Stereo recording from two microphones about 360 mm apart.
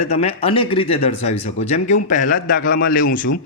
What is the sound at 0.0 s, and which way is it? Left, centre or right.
A man's voice, centre.